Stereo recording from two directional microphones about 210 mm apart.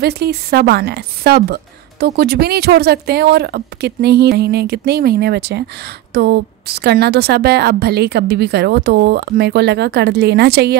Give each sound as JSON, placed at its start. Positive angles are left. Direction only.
{"t": 0.0, "sound": "a woman's voice", "side_deg": -50}